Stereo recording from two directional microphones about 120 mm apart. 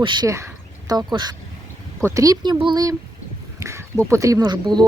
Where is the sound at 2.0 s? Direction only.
25° right (ahead or behind); by 2.8 s 40° right (ahead or behind).